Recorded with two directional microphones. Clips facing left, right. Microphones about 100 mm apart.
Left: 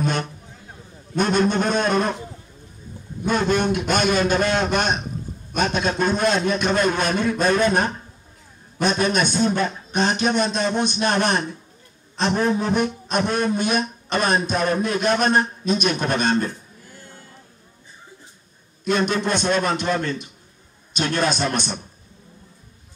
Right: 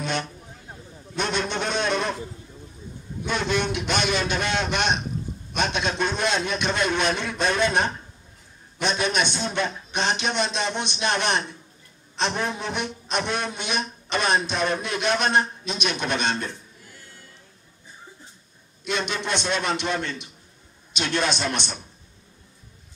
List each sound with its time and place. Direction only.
0.0 s a sound: 45° left (ahead or behind)
1.1 s a man's voice: 45° left (ahead or behind)
3.3 s a man's voice: 45° left (ahead or behind)
18.9 s a man's voice: 45° left (ahead or behind)